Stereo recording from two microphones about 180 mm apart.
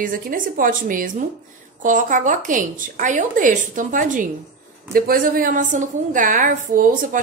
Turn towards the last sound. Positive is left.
turn(degrees=-50)  # may be behind; listen again after turning